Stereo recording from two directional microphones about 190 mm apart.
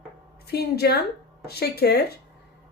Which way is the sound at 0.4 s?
55° left (ahead or behind).